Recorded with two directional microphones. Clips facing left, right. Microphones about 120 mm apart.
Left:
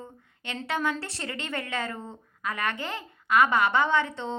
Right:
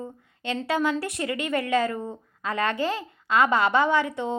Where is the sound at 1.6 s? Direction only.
15° right (ahead or behind).